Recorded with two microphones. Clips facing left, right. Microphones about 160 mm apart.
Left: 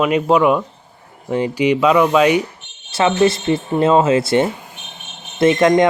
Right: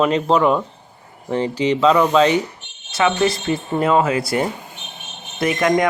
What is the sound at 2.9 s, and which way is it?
Speech, 30° left (ahead or behind).